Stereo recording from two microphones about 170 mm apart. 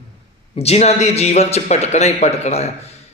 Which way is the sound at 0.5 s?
40° left (ahead or behind).